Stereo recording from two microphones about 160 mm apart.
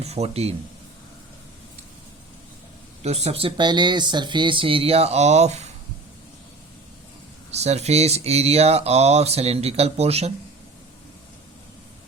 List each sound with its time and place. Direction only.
0.0 s speech: 40° right (ahead or behind)
3.0 s speech: 45° right (ahead or behind)
7.5 s speech: 45° right (ahead or behind)